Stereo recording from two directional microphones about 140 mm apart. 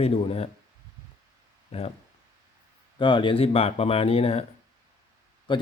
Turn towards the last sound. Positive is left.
turn(degrees=35)  # may be behind; listen again after turning